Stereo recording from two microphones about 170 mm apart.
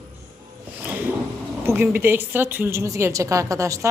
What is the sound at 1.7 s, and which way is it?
A woman's voice, 15° right (ahead or behind).